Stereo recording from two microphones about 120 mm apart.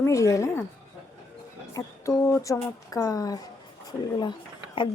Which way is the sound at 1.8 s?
25° left (ahead or behind).